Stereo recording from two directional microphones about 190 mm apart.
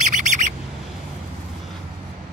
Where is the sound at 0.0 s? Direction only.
40° right (ahead or behind).